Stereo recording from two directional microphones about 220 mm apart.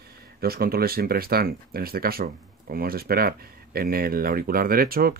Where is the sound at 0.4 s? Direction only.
45° right (ahead or behind).